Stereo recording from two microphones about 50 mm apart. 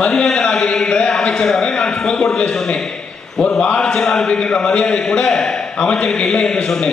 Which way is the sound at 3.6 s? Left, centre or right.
Left.